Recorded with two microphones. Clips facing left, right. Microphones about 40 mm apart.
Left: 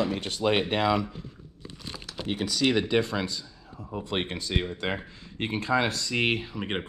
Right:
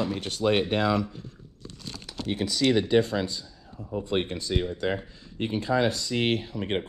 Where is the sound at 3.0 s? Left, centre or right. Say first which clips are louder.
Right 3 dB; left.